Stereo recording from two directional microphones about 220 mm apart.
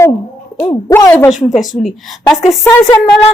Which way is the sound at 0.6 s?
20° left (ahead or behind).